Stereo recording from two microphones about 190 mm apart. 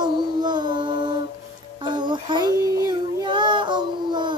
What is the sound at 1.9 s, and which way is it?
Child singing, 25° right (ahead or behind).